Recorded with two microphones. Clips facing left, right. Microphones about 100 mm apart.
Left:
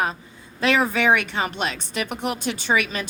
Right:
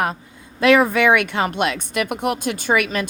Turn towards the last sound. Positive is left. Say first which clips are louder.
# right 3 dB
turn(degrees=-55)  # may be behind; listen again after turning